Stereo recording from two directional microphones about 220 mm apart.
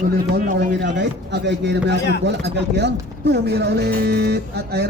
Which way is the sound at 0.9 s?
50° right (ahead or behind).